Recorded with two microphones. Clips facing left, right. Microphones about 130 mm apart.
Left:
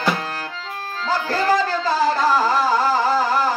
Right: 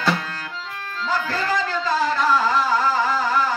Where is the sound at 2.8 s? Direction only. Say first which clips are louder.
Left 3 dB; 35° left (ahead or behind).